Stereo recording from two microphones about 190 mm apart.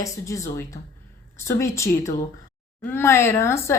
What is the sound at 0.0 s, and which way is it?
Speech, 15° left (ahead or behind).